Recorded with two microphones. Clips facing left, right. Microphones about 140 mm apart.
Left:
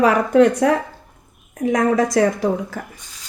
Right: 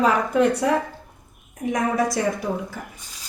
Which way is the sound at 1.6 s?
90° left.